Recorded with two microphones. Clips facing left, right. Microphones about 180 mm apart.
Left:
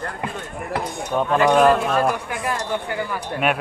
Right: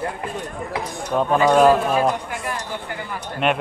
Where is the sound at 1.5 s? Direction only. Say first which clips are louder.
Right 2 dB; centre (ahead or behind).